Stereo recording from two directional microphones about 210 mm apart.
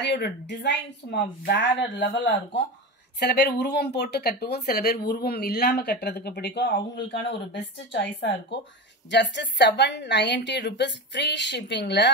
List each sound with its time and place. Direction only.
0.0 s a woman's voice: 55° left (ahead or behind)